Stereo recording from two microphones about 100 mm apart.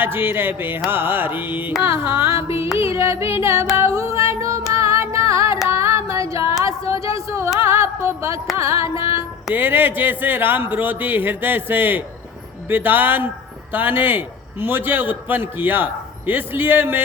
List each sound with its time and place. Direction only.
0.0 s a man's voice: 20° right (ahead or behind)
4.3 s music: 30° right (ahead or behind)
5.6 s female singing: 25° right (ahead or behind)
6.7 s a sound: 30° right (ahead or behind)
7.6 s music: 25° right (ahead or behind)
8.5 s a man's voice: 30° right (ahead or behind)